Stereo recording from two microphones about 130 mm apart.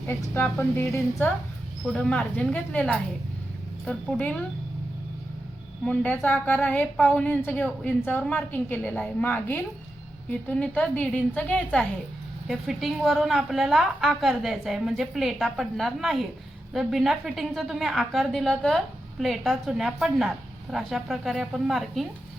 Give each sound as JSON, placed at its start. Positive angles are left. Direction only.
{"t": 0.1, "sound": "a woman's voice", "side_deg": 15}
{"t": 1.9, "sound": "a woman's voice", "side_deg": 5}
{"t": 5.8, "sound": "a woman's voice", "side_deg": 10}